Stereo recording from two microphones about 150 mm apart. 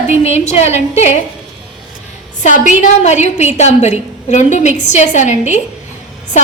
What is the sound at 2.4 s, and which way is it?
A woman's voice, 50° left (ahead or behind).